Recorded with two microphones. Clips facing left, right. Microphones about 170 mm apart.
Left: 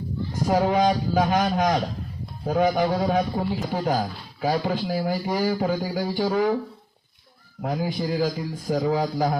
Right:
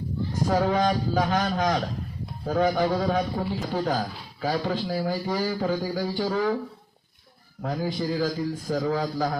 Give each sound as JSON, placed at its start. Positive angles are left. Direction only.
{"t": 0.4, "sound": "a man's voice", "side_deg": 15}
{"t": 7.6, "sound": "a man's voice", "side_deg": 15}